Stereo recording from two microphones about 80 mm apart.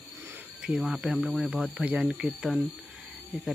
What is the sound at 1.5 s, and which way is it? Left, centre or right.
Speech, centre.